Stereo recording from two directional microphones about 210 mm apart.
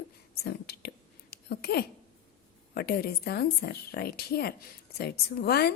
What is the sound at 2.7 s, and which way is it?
Speech, 50° left (ahead or behind).